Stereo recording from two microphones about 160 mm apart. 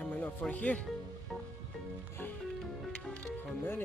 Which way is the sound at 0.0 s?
10° left (ahead or behind).